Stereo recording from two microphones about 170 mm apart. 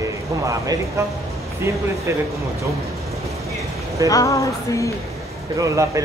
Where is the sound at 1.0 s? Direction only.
15° right (ahead or behind).